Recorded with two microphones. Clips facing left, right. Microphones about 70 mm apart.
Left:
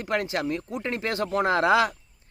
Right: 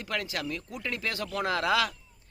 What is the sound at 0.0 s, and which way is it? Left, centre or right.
Speech, left.